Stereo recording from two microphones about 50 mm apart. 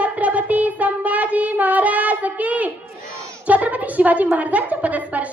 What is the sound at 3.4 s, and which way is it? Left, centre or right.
A woman's voice, right.